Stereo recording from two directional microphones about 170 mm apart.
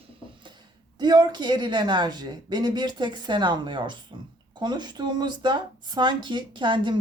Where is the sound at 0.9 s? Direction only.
25° right (ahead or behind).